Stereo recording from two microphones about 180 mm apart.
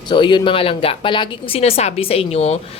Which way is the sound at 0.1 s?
25° left (ahead or behind).